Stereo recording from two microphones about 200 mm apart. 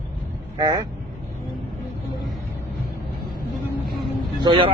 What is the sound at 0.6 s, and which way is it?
Speech, 20° right (ahead or behind).